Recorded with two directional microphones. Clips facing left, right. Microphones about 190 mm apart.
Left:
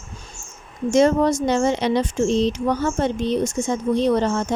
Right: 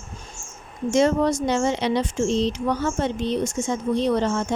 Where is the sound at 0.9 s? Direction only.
45° left (ahead or behind).